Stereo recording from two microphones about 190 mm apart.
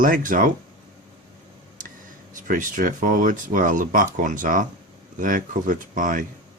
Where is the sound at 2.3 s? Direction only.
45° right (ahead or behind).